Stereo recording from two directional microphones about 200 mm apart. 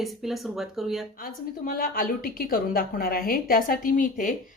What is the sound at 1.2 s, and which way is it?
A woman's voice, 45° left (ahead or behind).